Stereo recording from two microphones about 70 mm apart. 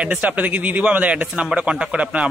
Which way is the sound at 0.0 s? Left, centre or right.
Right.